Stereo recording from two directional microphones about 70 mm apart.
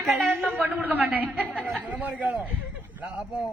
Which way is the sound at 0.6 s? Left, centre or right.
Right.